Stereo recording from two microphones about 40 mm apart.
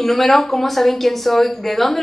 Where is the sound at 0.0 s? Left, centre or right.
Centre.